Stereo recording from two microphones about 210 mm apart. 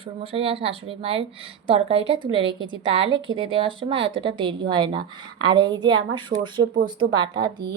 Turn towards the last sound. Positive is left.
turn(degrees=-20)  # may be behind; listen again after turning